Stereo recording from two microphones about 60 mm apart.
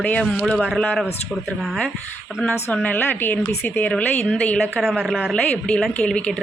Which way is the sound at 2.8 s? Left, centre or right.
Left.